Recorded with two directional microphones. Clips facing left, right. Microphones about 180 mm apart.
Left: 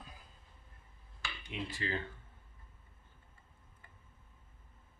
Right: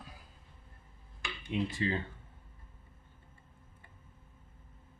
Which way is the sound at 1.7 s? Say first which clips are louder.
Right 5 dB; 25° right (ahead or behind).